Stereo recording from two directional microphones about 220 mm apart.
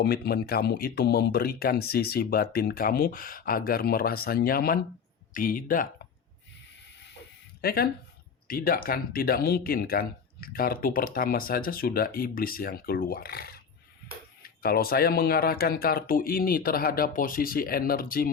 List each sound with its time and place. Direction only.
0.0 s speech: 45° left (ahead or behind)
7.6 s speech: 45° left (ahead or behind)